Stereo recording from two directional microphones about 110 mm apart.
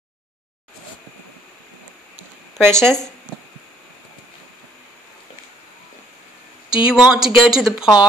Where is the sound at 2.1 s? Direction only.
20° right (ahead or behind).